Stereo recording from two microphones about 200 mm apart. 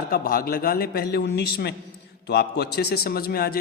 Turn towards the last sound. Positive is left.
turn(degrees=50)  # may be behind; listen again after turning